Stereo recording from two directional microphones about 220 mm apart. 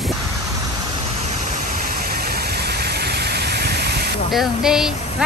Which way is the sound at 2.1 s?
45° right (ahead or behind).